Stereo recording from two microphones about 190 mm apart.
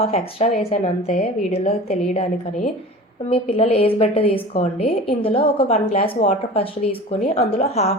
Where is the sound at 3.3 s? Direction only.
30° left (ahead or behind).